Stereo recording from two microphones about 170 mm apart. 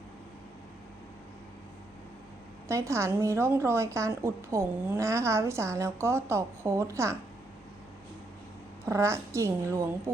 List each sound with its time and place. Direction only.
2.6 s a woman's voice: 15° right (ahead or behind)
8.9 s a woman's voice: 15° right (ahead or behind)